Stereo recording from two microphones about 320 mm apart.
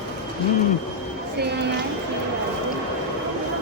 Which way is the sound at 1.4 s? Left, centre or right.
Right.